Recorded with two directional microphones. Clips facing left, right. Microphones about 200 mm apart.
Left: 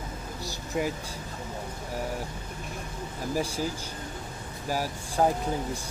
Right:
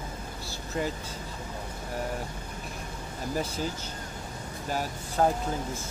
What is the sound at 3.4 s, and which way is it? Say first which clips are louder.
Speech: left 2 dB; 10° left (ahead or behind).